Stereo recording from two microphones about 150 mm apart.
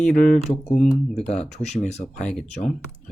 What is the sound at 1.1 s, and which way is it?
Speech, 45° left (ahead or behind).